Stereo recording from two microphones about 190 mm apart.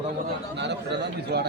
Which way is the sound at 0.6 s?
65° right (ahead or behind).